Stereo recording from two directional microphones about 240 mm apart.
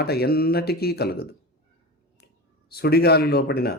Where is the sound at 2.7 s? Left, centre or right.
Left.